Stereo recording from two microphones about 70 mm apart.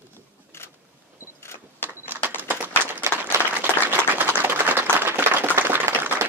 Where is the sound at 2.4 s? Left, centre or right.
Right.